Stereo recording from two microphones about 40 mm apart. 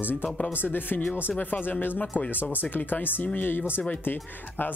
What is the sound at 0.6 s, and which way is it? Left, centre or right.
Speech, left.